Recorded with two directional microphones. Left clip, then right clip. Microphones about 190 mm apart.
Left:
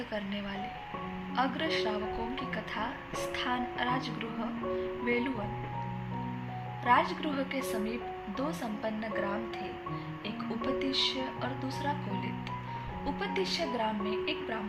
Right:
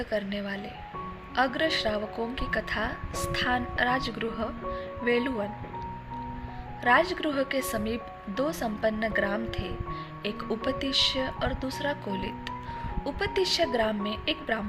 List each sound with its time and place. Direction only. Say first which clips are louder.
0.1 s a woman's voice: right 6 dB; 20° right (ahead or behind)
6.8 s a woman's voice: right 4 dB; 25° right (ahead or behind)